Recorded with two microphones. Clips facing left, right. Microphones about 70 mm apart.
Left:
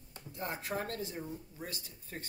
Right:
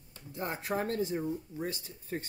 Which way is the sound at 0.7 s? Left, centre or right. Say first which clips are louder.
Right 5 dB; right.